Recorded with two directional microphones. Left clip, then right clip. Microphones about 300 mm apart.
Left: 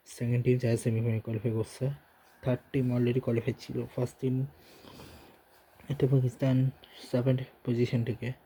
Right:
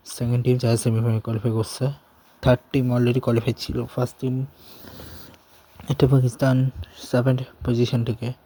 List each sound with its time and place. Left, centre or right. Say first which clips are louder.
0.1 s speech: right 6 dB; right
5.9 s speech: right 9 dB; right